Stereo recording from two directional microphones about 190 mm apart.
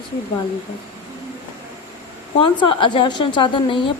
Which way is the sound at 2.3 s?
25° left (ahead or behind).